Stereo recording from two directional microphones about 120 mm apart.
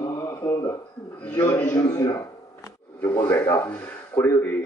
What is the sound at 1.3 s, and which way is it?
Speech, 15° left (ahead or behind).